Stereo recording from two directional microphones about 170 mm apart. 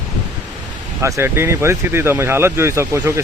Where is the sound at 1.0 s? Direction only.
15° right (ahead or behind).